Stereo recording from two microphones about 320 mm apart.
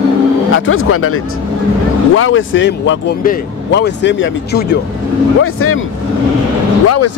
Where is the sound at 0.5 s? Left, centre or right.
Left.